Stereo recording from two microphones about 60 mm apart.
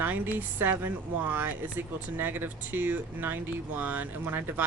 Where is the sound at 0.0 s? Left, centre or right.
Right.